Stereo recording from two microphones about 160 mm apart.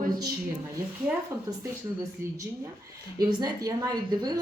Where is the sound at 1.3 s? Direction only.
15° right (ahead or behind).